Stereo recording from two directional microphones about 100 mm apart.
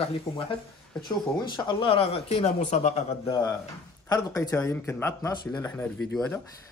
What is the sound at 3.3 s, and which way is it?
Speech, 40° left (ahead or behind).